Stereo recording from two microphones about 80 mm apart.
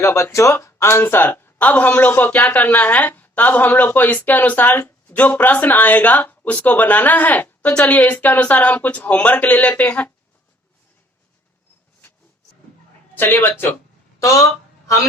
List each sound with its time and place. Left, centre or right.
0.0 s speech: left; by 10.1 s centre
13.1 s speech: left